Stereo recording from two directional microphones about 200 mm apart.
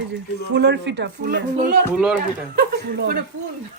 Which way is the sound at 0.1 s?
60° right (ahead or behind).